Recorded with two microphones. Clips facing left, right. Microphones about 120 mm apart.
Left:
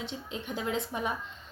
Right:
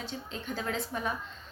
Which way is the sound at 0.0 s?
20° left (ahead or behind).